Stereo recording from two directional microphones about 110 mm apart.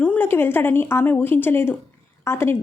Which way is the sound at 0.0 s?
15° left (ahead or behind).